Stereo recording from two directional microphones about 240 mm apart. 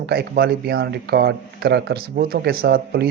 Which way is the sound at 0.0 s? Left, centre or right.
Right.